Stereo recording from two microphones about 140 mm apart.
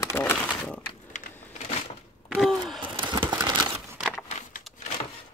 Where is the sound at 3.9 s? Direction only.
Centre (ahead or behind).